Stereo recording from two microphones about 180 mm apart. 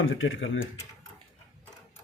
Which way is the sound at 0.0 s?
90° left.